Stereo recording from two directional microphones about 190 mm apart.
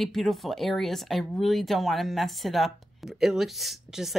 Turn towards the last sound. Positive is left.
turn(degrees=0)  # may be behind; listen again after turning